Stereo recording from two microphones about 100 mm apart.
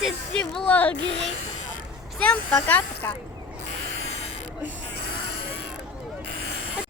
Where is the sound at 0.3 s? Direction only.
10° left (ahead or behind).